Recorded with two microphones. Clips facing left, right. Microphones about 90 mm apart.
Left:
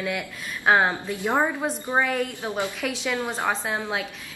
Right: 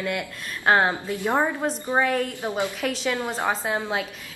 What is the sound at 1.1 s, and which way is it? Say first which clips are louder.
Speech: right 1 dB; 15° left (ahead or behind).